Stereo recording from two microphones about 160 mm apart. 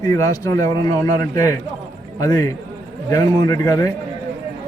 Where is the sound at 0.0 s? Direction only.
20° left (ahead or behind).